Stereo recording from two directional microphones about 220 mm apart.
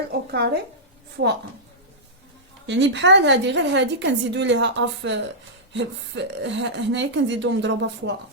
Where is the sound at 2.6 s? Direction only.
55° right (ahead or behind).